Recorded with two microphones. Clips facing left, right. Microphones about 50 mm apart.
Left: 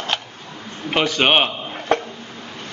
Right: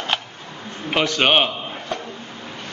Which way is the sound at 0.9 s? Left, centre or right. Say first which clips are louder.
Left 1 dB; centre.